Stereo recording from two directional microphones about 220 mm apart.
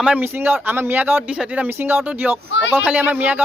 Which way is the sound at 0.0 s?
5° right (ahead or behind).